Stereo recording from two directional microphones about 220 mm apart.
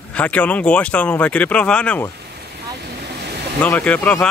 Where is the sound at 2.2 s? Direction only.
50° right (ahead or behind).